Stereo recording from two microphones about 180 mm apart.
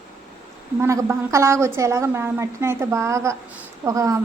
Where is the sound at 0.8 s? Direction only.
15° right (ahead or behind).